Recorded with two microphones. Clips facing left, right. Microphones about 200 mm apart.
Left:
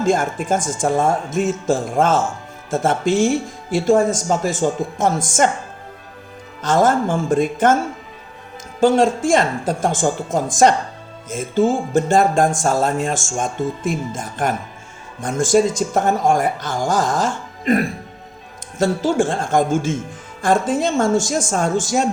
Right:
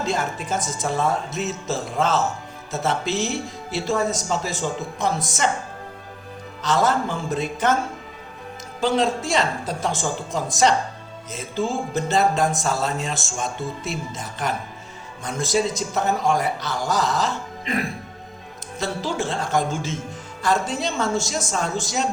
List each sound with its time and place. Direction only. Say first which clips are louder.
0.0 s speech: left 7 dB; 50° left (ahead or behind)
6.6 s speech: left 5 dB; 50° left (ahead or behind)
8.8 s speech: left 7 dB; 50° left (ahead or behind)